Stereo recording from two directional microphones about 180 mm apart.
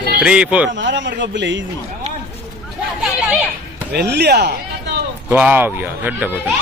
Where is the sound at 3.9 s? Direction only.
65° right (ahead or behind).